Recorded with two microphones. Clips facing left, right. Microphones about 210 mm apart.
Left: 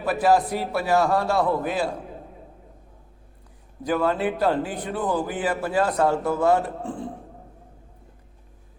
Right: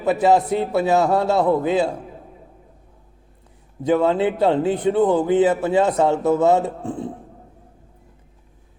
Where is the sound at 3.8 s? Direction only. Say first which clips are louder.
Right 5 dB; 25° right (ahead or behind).